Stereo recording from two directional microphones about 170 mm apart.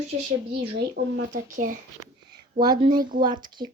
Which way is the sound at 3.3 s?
25° right (ahead or behind).